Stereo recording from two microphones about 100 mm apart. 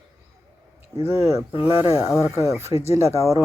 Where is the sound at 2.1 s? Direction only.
5° right (ahead or behind).